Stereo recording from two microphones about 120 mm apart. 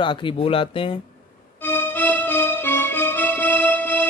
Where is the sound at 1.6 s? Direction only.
15° left (ahead or behind).